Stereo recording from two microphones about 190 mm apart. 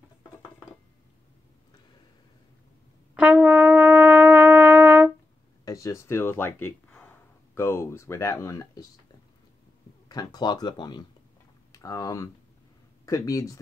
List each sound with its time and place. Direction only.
3.2 s brass instrument: 5° right (ahead or behind)
5.7 s speech: 15° left (ahead or behind)
10.0 s speech: 20° left (ahead or behind)